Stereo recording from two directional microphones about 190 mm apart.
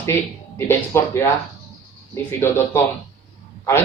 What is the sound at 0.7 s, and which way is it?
Speech, 15° left (ahead or behind).